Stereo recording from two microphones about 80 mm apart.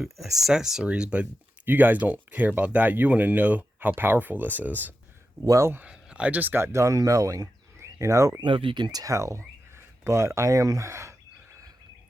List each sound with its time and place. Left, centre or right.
0.3 s speech: centre; by 4.9 s right
5.5 s speech: right
5.9 s speech: centre; by 8.4 s right
8.4 s speech: right
9.1 s speech: right